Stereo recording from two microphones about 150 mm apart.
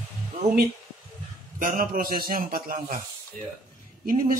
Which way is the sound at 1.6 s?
65° right (ahead or behind).